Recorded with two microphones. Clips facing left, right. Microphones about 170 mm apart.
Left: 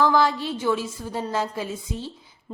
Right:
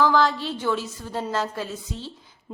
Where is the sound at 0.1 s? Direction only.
10° left (ahead or behind).